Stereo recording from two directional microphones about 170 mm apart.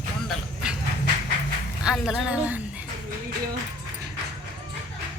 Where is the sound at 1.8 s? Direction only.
5° right (ahead or behind).